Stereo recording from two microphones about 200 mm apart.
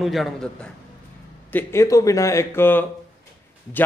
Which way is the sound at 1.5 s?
15° left (ahead or behind).